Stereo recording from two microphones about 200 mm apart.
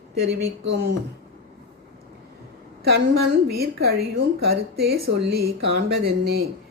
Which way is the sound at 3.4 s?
50° right (ahead or behind).